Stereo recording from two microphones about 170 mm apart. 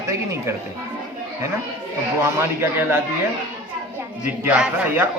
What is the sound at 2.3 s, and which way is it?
Speech, 15° right (ahead or behind).